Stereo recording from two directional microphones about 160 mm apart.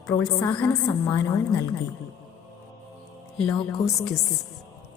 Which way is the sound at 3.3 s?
5° left (ahead or behind).